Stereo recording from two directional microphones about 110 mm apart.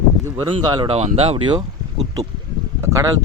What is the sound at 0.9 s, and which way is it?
Speech, 65° right (ahead or behind).